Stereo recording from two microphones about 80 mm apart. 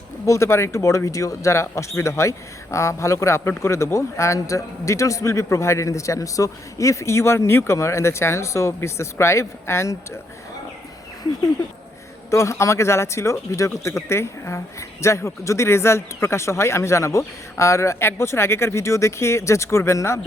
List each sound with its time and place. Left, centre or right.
0.3 s a man's voice: left
12.3 s a man's voice: left